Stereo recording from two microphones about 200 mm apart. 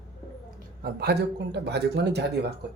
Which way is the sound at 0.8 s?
55° right (ahead or behind).